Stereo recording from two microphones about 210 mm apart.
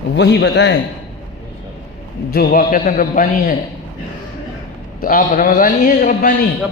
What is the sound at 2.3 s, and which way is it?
A man's voice, 45° left (ahead or behind).